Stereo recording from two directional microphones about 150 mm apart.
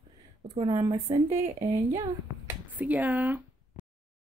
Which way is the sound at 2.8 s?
10° right (ahead or behind).